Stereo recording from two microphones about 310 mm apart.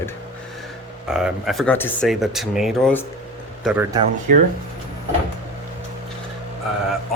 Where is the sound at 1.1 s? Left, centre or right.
Centre.